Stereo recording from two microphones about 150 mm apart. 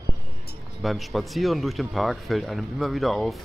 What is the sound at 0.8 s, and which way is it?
Speech, centre (ahead or behind).